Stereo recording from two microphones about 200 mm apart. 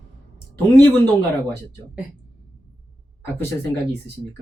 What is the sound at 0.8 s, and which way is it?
Speech, 10° left (ahead or behind).